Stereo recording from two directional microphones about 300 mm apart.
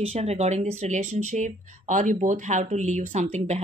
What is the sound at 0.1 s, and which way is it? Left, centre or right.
Speech, right.